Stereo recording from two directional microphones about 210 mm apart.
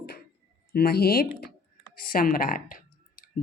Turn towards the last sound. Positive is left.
turn(degrees=45)  # may be behind; listen again after turning